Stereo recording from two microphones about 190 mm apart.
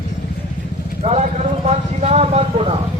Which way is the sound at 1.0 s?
35° right (ahead or behind).